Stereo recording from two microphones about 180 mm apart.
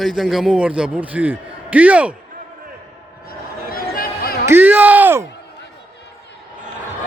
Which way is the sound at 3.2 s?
55° left (ahead or behind).